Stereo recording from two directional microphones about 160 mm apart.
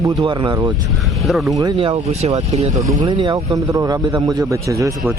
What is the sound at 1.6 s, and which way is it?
Speech, 30° right (ahead or behind).